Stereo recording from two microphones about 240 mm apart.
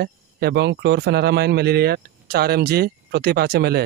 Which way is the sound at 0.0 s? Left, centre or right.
Right.